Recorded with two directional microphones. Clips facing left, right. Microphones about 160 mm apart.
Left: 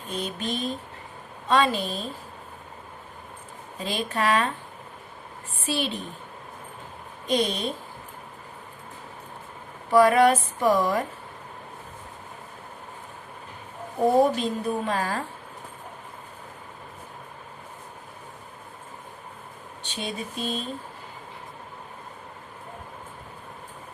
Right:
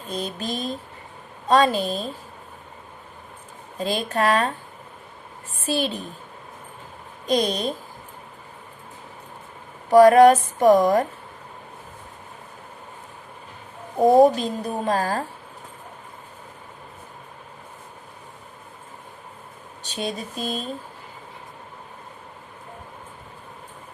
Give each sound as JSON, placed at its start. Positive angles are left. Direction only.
{"t": 0.1, "sound": "speech", "side_deg": -40}
{"t": 3.8, "sound": "speech", "side_deg": -40}
{"t": 5.6, "sound": "speech", "side_deg": -40}
{"t": 7.3, "sound": "speech", "side_deg": -40}
{"t": 9.9, "sound": "speech", "side_deg": -40}
{"t": 14.0, "sound": "speech", "side_deg": -40}
{"t": 19.8, "sound": "a sound", "side_deg": -40}